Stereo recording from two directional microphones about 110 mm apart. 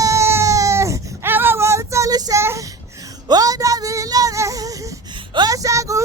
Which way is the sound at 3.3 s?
35° right (ahead or behind).